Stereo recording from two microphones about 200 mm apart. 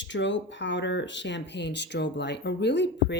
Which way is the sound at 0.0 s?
65° left (ahead or behind).